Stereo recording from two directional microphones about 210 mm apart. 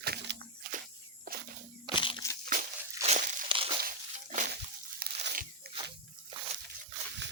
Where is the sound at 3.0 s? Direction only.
35° right (ahead or behind).